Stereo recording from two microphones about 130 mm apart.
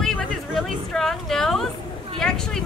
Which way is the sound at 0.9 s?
Centre (ahead or behind).